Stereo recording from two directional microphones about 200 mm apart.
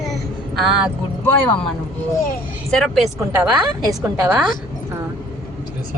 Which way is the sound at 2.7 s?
Centre (ahead or behind).